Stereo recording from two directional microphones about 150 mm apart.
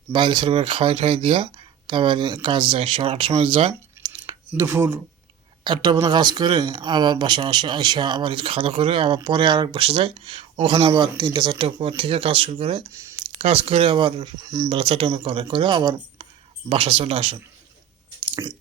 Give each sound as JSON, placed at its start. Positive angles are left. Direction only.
{"t": 0.1, "sound": "speech", "side_deg": -30}
{"t": 4.0, "sound": "a sound", "side_deg": -30}
{"t": 4.5, "sound": "speech", "side_deg": -15}
{"t": 5.6, "sound": "speech", "side_deg": -30}